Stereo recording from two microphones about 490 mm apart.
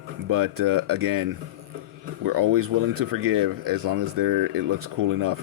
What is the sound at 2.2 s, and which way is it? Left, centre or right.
Speech, right.